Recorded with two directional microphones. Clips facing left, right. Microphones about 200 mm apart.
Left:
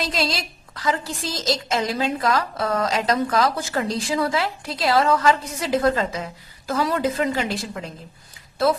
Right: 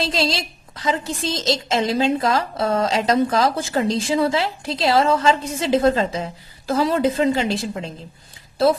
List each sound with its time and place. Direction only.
0.0 s a woman's voice: 30° right (ahead or behind)